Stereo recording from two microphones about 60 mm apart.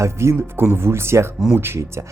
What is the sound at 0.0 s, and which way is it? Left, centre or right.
A man's voice, right.